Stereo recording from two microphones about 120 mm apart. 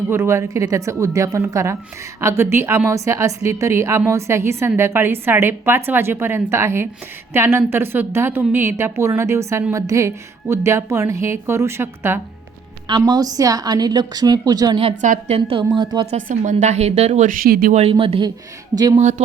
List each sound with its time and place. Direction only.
0.1 s a woman's voice: 20° right (ahead or behind)
12.9 s a woman's voice: 35° right (ahead or behind)
15.0 s a woman's voice: 90° right
15.4 s a woman's voice: 45° right (ahead or behind)
16.1 s a woman's voice: 90° right
17.8 s a woman's voice: 50° right (ahead or behind)
18.9 s a woman's voice: 80° right